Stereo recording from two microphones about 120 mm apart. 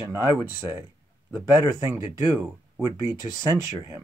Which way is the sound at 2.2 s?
30° right (ahead or behind).